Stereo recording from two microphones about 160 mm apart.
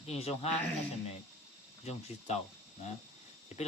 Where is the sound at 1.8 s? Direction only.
40° left (ahead or behind).